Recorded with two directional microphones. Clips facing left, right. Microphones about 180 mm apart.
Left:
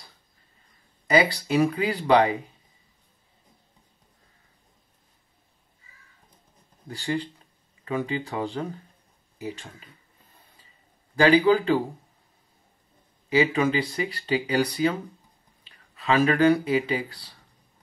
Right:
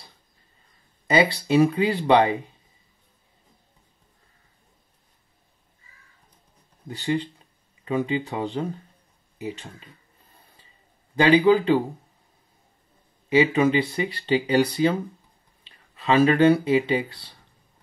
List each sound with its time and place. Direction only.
1.0 s speech: 25° right (ahead or behind)
6.9 s speech: 20° right (ahead or behind)
11.1 s speech: 20° right (ahead or behind)
13.3 s speech: 20° right (ahead or behind)